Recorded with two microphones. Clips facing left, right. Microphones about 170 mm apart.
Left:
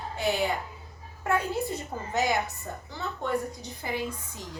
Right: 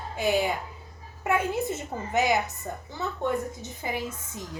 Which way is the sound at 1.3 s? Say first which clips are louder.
Right 2 dB; 20° right (ahead or behind).